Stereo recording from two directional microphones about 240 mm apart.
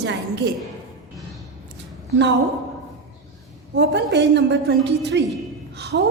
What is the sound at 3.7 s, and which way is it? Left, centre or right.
A woman's voice, right.